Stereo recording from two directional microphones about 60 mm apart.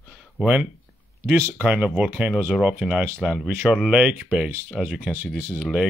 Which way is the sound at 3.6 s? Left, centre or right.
Centre.